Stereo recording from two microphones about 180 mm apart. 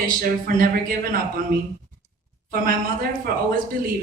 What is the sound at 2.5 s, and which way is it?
Speech, 50° right (ahead or behind).